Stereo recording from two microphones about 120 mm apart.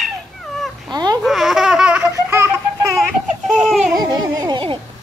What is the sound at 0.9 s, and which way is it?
Babbling, 35° right (ahead or behind).